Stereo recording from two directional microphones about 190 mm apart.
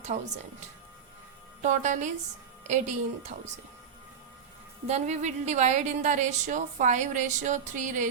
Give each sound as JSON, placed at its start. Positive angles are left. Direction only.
{"t": 1.6, "sound": "a woman's voice", "side_deg": -40}
{"t": 4.9, "sound": "a woman's voice", "side_deg": -35}